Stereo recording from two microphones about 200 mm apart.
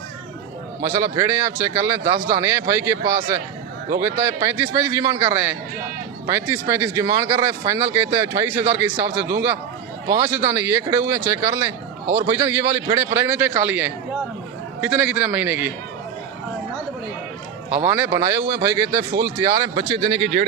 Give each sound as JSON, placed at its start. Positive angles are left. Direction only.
{"t": 0.8, "sound": "speech", "side_deg": -15}
{"t": 17.8, "sound": "speech", "side_deg": -10}
{"t": 19.9, "sound": "speech", "side_deg": -30}